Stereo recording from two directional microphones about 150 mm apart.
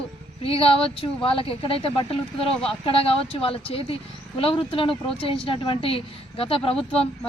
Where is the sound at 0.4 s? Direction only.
40° left (ahead or behind).